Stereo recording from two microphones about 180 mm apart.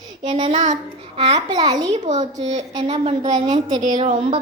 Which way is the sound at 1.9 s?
40° right (ahead or behind).